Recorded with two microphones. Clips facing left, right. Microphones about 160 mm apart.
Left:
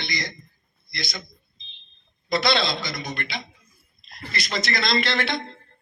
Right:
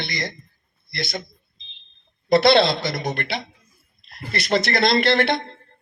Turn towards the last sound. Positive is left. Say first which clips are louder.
# right 6 dB
turn(degrees=-60)  # may be behind; listen again after turning